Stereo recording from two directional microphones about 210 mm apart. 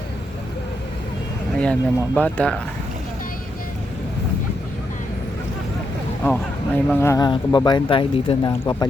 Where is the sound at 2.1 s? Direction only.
5° left (ahead or behind).